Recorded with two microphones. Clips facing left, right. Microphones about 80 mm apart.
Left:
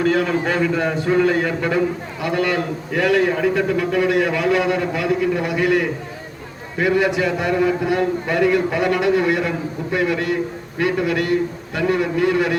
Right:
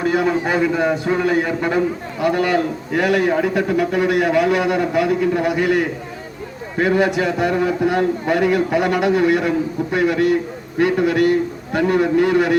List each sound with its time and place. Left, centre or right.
0.0 s a man's voice: right